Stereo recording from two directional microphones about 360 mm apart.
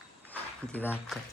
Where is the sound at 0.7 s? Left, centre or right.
Centre.